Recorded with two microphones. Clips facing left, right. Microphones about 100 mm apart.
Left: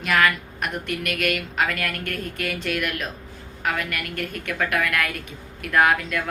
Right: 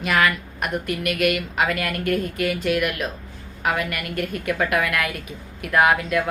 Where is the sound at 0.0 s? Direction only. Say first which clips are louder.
Even; 5° right (ahead or behind).